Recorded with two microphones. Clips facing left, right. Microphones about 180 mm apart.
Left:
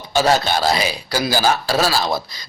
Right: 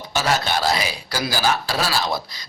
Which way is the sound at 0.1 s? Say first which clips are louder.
Left 5 dB; 30° left (ahead or behind).